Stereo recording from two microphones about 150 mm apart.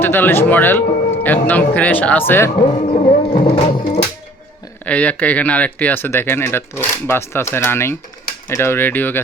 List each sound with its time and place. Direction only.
0.0 s speech: 15° left (ahead or behind)
2.8 s music: 40° left (ahead or behind)
4.9 s speech: 10° left (ahead or behind)